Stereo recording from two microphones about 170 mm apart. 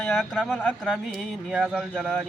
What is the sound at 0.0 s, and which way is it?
Speech, 5° left (ahead or behind).